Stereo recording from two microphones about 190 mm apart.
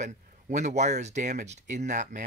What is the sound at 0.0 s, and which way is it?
Speech, 40° right (ahead or behind).